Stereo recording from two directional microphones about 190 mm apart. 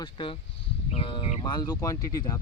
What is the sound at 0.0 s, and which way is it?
Speech, 25° left (ahead or behind).